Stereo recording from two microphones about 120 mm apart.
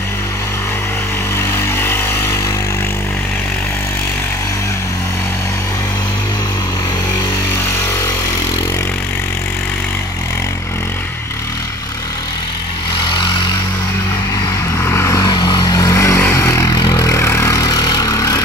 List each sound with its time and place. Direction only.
1.8 s vehicle: 20° left (ahead or behind)
13.1 s vehicle: 40° left (ahead or behind)
14.8 s vehicle: 20° left (ahead or behind)
15.2 s vehicle: 40° left (ahead or behind)